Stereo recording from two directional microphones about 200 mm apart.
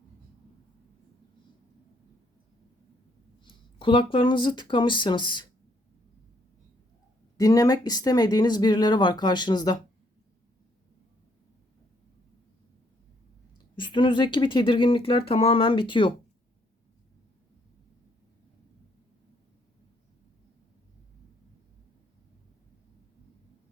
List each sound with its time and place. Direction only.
3.4 s speech: 25° left (ahead or behind)
7.3 s speech: 15° left (ahead or behind)
13.7 s speech: 25° left (ahead or behind)